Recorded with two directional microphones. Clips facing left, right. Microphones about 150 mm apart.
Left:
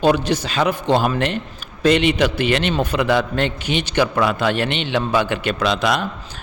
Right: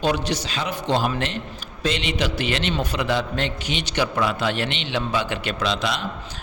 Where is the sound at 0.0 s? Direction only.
55° left (ahead or behind).